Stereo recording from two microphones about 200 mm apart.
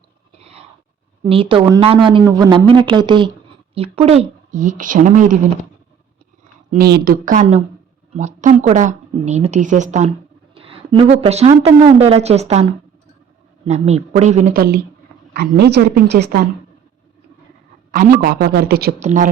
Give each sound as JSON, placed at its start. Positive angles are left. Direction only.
{"t": 1.2, "sound": "a woman's voice", "side_deg": -25}
{"t": 6.7, "sound": "a woman's voice", "side_deg": -50}
{"t": 10.5, "sound": "a sound", "side_deg": -30}
{"t": 11.3, "sound": "a woman's voice", "side_deg": -30}
{"t": 17.9, "sound": "a woman's voice", "side_deg": -45}
{"t": 18.9, "sound": "speech", "side_deg": -35}